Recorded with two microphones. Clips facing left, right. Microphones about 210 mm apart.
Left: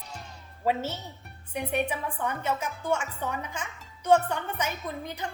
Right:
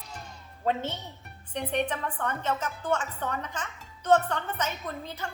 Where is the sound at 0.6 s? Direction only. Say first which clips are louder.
Left 1 dB; 5° left (ahead or behind).